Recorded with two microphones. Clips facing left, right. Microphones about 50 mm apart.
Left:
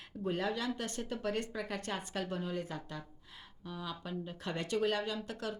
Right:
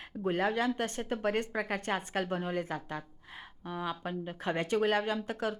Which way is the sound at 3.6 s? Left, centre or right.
Right.